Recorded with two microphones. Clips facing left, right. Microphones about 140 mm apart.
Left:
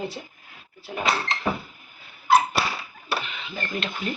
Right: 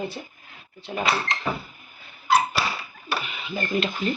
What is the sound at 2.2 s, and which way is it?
Dog, 55° left (ahead or behind).